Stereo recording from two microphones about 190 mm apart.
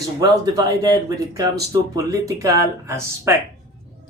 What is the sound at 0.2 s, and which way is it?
Speech, 20° right (ahead or behind).